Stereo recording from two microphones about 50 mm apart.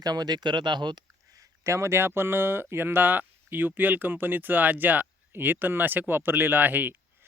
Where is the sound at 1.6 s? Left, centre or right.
Right.